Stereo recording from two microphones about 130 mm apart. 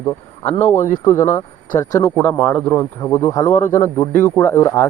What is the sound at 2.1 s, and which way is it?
Speech, 10° left (ahead or behind).